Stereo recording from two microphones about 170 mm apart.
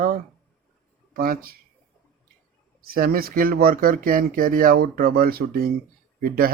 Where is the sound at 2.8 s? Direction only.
55° right (ahead or behind).